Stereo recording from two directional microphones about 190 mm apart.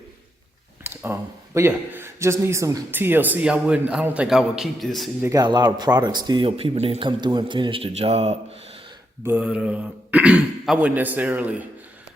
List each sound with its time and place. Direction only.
0.9 s speech: 15° right (ahead or behind)
5.2 s speech: 20° right (ahead or behind)
9.2 s speech: 10° right (ahead or behind)